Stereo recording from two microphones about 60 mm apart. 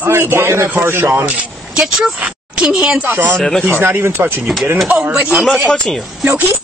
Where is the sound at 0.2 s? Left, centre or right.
Right.